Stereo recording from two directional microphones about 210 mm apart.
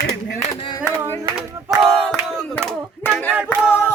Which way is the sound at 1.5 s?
15° right (ahead or behind).